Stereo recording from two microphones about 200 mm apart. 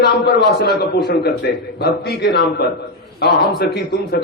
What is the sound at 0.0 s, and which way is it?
A man's voice, 55° left (ahead or behind).